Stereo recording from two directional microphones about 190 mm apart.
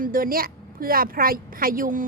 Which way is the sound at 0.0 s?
50° right (ahead or behind).